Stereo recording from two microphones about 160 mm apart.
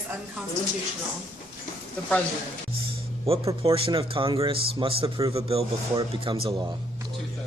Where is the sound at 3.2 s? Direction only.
35° right (ahead or behind).